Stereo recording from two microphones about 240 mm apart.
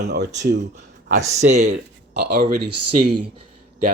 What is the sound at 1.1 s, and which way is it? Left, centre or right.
Speech, right.